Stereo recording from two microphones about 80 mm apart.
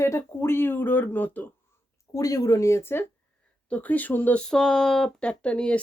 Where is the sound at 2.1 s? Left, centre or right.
Left.